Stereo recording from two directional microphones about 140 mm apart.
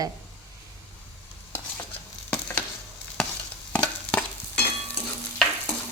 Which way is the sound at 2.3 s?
10° left (ahead or behind).